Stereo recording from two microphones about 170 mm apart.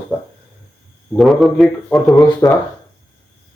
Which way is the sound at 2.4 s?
20° left (ahead or behind).